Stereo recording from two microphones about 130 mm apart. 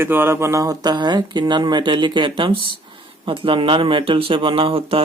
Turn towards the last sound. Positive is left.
turn(degrees=-45)  # may be behind; listen again after turning